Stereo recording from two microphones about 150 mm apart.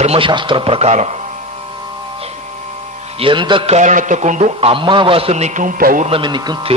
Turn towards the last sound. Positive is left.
turn(degrees=-30)  # may be behind; listen again after turning